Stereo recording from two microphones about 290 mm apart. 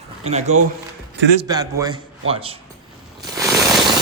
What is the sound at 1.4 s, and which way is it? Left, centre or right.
A man's voice, centre.